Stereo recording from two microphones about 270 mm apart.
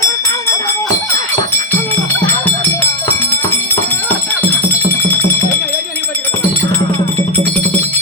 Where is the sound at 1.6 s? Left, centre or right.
Centre.